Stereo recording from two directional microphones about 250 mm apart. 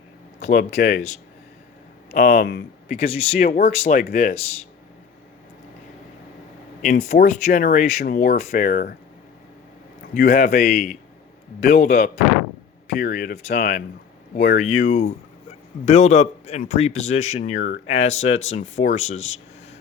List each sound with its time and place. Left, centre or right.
0.3 s a sound: left
0.8 s speech: left
2.0 s speech: left
2.9 s speech: left
6.8 s speech: left
10.2 s speech: left
14.8 s speech: left